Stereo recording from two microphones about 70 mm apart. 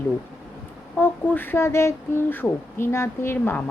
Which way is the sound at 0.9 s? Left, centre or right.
Left.